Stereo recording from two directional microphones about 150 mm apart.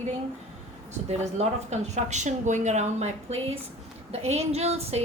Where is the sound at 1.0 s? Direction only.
45° right (ahead or behind).